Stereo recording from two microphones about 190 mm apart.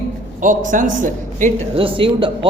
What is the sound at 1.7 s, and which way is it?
Speech, 30° right (ahead or behind).